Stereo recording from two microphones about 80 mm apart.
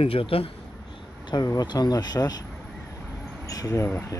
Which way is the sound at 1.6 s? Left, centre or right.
Left.